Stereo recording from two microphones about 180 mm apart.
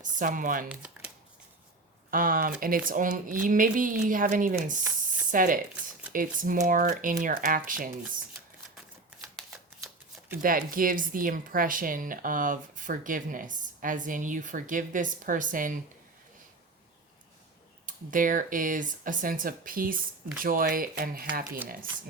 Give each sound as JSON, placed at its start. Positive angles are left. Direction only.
{"t": 0.0, "sound": "speech", "side_deg": -45}
{"t": 0.7, "sound": "crumpling", "side_deg": -5}
{"t": 2.0, "sound": "speech", "side_deg": -50}
{"t": 10.4, "sound": "speech", "side_deg": -50}
{"t": 17.8, "sound": "speech", "side_deg": -45}